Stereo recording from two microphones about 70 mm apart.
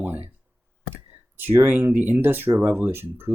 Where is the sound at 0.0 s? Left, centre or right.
Right.